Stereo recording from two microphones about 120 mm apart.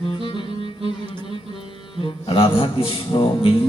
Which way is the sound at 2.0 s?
50° left (ahead or behind).